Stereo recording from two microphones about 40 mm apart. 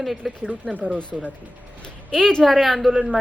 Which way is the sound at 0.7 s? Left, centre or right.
Right.